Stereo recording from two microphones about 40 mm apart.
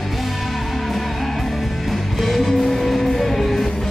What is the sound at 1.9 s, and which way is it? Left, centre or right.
Music, centre.